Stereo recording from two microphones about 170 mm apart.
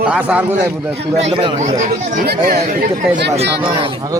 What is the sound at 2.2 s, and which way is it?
Speech, 65° right (ahead or behind).